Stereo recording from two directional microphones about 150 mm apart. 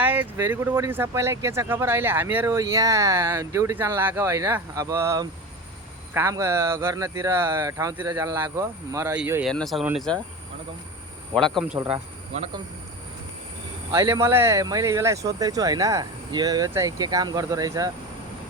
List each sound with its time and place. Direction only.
0.0 s speech: 10° right (ahead or behind)
9.5 s speech: centre (ahead or behind)
11.3 s speech: 5° left (ahead or behind)
11.9 s speech: 45° right (ahead or behind)
13.9 s speech: 20° right (ahead or behind)